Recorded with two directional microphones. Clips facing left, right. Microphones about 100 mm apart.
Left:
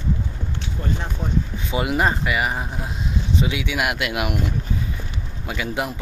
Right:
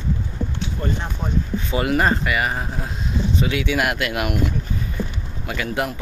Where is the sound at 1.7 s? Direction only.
15° left (ahead or behind).